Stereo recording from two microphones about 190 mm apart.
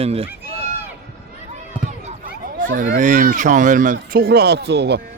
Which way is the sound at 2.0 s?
45° right (ahead or behind).